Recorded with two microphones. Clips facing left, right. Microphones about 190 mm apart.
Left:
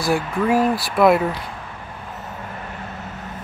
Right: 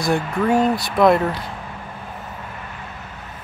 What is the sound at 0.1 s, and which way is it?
Speech, 5° left (ahead or behind).